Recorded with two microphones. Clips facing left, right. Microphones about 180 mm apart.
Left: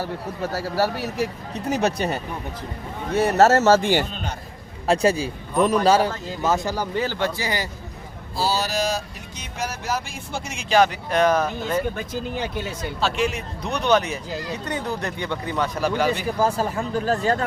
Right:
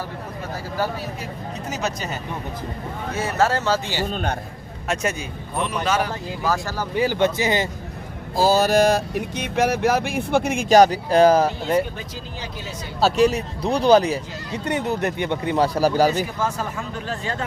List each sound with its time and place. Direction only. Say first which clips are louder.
0.5 s speech: left 2 dB; 80° left; by 2.1 s 60° left (ahead or behind)
3.2 s speech: left 5 dB; 40° left (ahead or behind)
4.1 s speech: right 6 dB; 55° right (ahead or behind)
4.9 s speech: left 6 dB; 30° left (ahead or behind)
6.9 s speech: right 9 dB; 15° right (ahead or behind)
8.4 s speech: right 7 dB; 50° right (ahead or behind); by 11.8 s 30° right (ahead or behind)
11.9 s speech: left 6 dB; 55° left (ahead or behind)
13.0 s speech: right 7 dB; 40° right (ahead or behind); by 15.5 s 20° right (ahead or behind)
15.5 s speech: right 5 dB; 35° right (ahead or behind)
16.4 s speech: left 4 dB; 35° left (ahead or behind)